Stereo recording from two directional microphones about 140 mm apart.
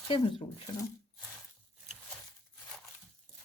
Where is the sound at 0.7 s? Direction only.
25° left (ahead or behind).